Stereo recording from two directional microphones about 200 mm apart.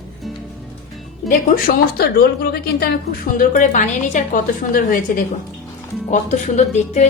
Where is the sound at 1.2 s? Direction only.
45° left (ahead or behind).